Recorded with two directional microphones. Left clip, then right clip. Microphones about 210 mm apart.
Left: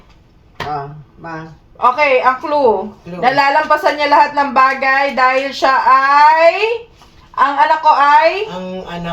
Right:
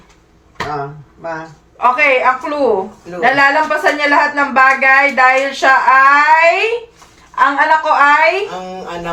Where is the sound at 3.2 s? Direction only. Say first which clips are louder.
Right 1 dB; 55° left (ahead or behind).